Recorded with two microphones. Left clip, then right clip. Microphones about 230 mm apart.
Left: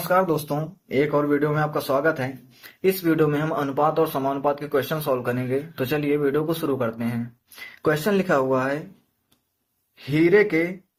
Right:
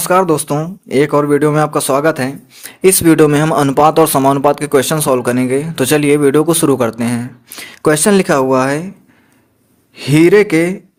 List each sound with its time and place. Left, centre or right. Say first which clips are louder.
0.1 s speech: right 9 dB; right
9.9 s speech: right 10 dB; right